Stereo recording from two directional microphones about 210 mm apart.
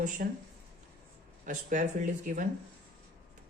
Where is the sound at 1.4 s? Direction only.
40° right (ahead or behind).